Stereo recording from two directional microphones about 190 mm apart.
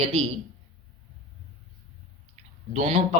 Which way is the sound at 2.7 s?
40° right (ahead or behind).